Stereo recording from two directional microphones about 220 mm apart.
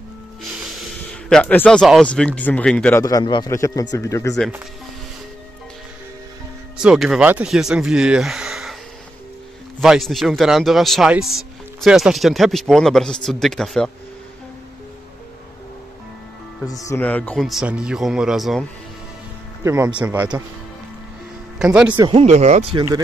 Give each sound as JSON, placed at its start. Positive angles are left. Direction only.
{"t": 1.3, "sound": "speech", "side_deg": 5}
{"t": 6.8, "sound": "speech", "side_deg": -5}
{"t": 9.8, "sound": "speech", "side_deg": 0}
{"t": 16.6, "sound": "speech", "side_deg": 15}
{"t": 19.6, "sound": "speech", "side_deg": -15}
{"t": 21.5, "sound": "speech", "side_deg": -5}
{"t": 21.9, "sound": "speech", "side_deg": -25}